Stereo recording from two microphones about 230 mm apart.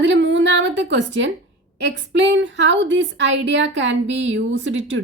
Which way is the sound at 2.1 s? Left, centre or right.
Right.